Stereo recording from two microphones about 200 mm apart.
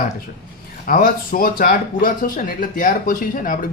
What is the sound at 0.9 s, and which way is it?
Speech, 45° left (ahead or behind).